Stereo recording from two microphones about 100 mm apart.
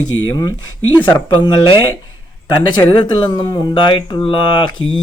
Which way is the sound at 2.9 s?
50° left (ahead or behind).